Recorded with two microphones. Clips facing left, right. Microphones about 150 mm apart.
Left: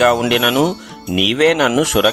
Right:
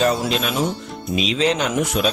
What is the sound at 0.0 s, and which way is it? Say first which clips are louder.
Speech: left 6 dB; 80° left.